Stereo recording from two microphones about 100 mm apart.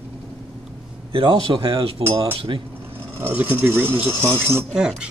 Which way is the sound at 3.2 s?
20° right (ahead or behind).